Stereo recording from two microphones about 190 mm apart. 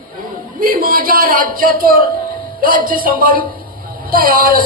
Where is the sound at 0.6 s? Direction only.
50° right (ahead or behind).